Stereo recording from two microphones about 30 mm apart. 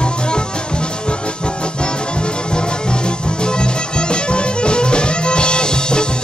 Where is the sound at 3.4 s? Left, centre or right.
Left.